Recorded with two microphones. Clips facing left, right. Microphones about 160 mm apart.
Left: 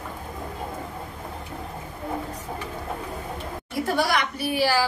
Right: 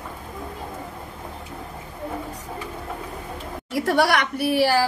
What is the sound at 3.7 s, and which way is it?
A woman's voice, 80° right.